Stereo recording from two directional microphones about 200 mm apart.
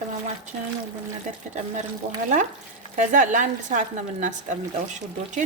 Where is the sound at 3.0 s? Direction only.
40° right (ahead or behind).